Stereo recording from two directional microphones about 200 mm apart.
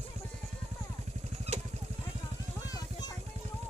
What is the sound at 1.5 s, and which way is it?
Vehicle, 30° right (ahead or behind).